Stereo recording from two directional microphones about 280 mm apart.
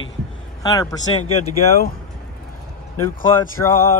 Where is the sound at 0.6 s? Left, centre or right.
Centre.